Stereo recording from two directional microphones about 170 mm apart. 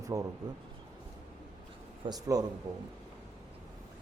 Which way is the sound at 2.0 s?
20° right (ahead or behind).